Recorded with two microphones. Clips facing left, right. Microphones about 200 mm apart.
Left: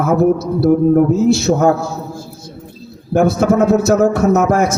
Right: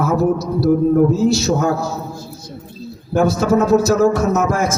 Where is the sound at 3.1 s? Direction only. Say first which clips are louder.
Left 2 dB; 55° left (ahead or behind).